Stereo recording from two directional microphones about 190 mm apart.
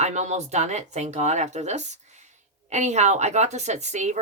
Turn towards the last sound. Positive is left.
turn(degrees=-35)  # may be behind; listen again after turning